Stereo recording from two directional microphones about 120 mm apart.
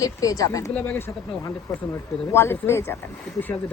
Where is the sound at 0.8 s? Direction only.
15° left (ahead or behind).